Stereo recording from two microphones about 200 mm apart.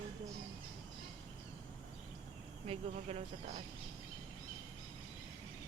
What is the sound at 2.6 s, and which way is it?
Speech, 30° right (ahead or behind).